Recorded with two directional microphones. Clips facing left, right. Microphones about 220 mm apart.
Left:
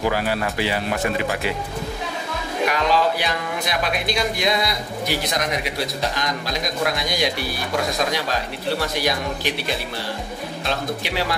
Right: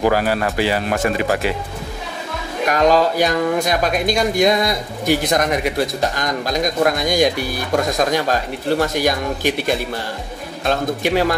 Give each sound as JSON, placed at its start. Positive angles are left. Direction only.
{"t": 0.0, "sound": "speech", "side_deg": -45}
{"t": 2.7, "sound": "speech", "side_deg": -45}